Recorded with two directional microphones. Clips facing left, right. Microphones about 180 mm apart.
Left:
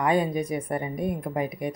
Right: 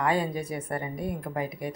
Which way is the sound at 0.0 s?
20° left (ahead or behind).